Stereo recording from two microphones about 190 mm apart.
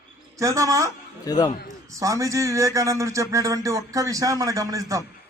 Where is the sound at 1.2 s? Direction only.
20° left (ahead or behind).